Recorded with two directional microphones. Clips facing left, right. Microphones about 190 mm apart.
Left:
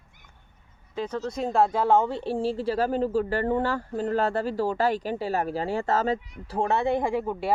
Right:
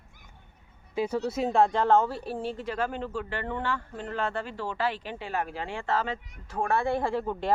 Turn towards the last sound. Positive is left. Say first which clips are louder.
# left 2 dB
turn(degrees=10)  # may be behind; listen again after turning